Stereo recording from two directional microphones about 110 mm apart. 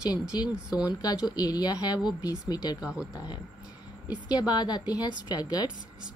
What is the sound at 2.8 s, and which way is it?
Speech, 10° right (ahead or behind).